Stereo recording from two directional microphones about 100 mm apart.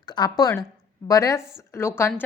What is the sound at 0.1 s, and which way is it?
A woman's voice, 40° left (ahead or behind).